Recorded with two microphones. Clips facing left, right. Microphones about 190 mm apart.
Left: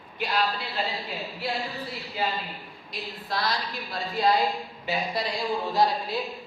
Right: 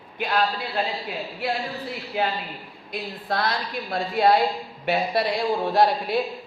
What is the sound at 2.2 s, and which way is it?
A woman's voice, 60° right (ahead or behind).